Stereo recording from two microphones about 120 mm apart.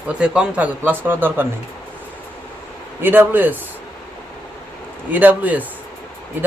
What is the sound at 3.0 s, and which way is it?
Speech, 15° right (ahead or behind).